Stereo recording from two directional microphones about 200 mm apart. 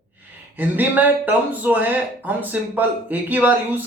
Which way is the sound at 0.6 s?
10° right (ahead or behind).